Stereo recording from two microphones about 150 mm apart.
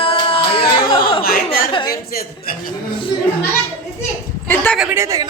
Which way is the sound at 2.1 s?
80° left.